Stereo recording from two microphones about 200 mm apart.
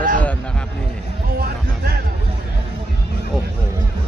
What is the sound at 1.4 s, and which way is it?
Music, 50° right (ahead or behind).